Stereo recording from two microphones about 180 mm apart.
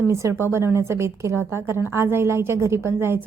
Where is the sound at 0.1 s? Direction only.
15° right (ahead or behind).